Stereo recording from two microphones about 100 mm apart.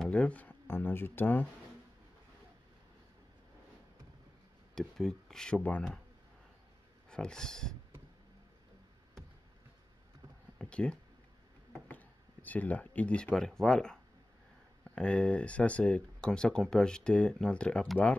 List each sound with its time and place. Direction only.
0.0 s speech: 10° left (ahead or behind)
4.7 s speech: 5° left (ahead or behind)
7.1 s speech: 10° left (ahead or behind)
10.6 s speech: 10° left (ahead or behind)
15.0 s speech: 10° left (ahead or behind)